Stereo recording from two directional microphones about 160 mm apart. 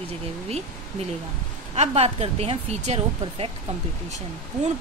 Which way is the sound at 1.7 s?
45° right (ahead or behind).